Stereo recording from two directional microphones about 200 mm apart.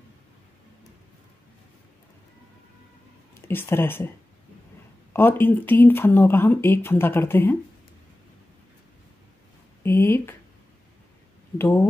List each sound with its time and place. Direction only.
3.3 s speech: 10° left (ahead or behind)
5.1 s speech: 10° left (ahead or behind)
9.8 s speech: 10° left (ahead or behind)
11.5 s speech: 10° left (ahead or behind)